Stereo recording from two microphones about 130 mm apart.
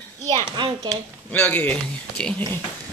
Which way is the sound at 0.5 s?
35° right (ahead or behind).